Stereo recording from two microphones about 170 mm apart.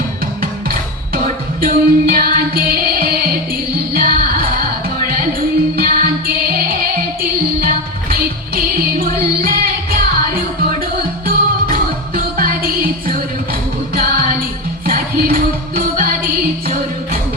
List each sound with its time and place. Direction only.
1.6 s music: 60° right (ahead or behind)
5.7 s music: 60° right (ahead or behind)
8.1 s music: 60° right (ahead or behind)